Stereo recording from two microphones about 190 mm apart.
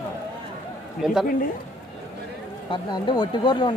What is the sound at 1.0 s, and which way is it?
Speech, 5° right (ahead or behind).